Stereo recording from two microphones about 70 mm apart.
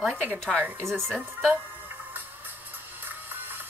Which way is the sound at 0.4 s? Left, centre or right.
Centre.